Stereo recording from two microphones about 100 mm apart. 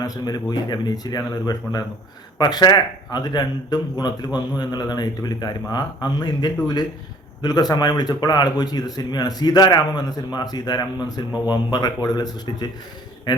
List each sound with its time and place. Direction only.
0.0 s a man's voice: 40° left (ahead or behind)